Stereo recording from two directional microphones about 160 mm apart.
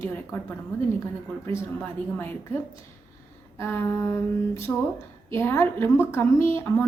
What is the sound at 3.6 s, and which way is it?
A woman's voice, 15° left (ahead or behind).